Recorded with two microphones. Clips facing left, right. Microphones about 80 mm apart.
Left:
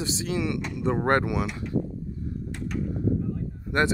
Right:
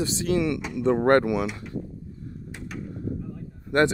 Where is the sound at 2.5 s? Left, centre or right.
Centre.